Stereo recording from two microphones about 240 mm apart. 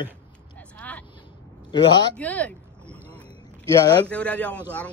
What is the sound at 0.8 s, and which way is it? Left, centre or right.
Vehicle, centre.